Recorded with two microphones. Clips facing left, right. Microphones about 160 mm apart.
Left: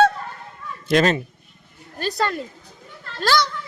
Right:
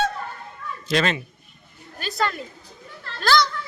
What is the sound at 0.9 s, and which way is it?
Speech, 45° left (ahead or behind).